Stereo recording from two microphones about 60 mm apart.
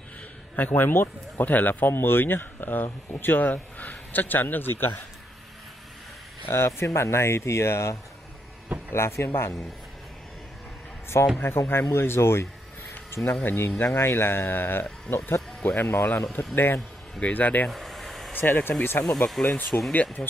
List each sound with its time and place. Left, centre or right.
0.6 s speech: left
6.4 s speech: left
8.9 s speech: left
11.4 s speech: left
12.9 s a sound: left
13.6 s speech: left
17.6 s vehicle: centre
18.3 s speech: left
19.0 s speech: centre
19.4 s speech: left